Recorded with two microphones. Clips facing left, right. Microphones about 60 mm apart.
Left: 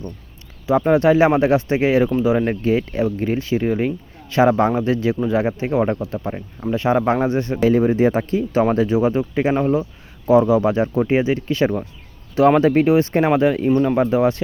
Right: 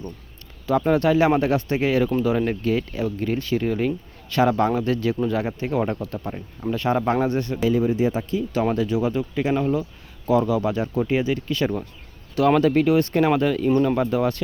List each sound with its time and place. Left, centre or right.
0.7 s speech: centre